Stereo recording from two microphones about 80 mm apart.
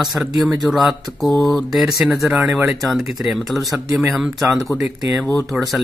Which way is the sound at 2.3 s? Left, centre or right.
Centre.